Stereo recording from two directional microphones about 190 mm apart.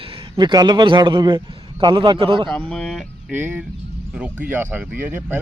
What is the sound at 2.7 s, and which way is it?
Speech, 5° left (ahead or behind).